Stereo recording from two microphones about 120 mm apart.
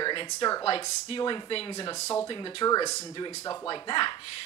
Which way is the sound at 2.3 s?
45° left (ahead or behind).